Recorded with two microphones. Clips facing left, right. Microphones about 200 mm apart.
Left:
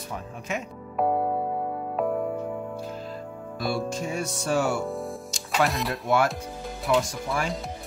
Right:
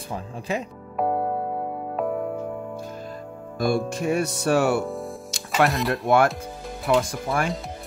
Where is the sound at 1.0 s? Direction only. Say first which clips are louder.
Even; centre (ahead or behind).